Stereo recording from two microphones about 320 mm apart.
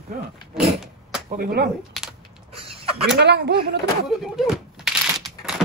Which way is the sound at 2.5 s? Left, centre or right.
Centre.